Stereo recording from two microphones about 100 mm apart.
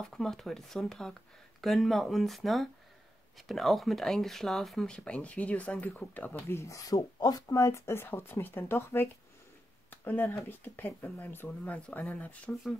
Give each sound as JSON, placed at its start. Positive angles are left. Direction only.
{"t": 0.0, "sound": "speech", "side_deg": 5}